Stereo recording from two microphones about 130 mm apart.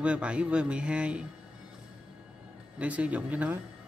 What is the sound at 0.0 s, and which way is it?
Speech, 10° right (ahead or behind).